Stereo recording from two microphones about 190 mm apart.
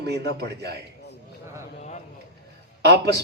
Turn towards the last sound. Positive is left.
turn(degrees=-60)  # may be behind; listen again after turning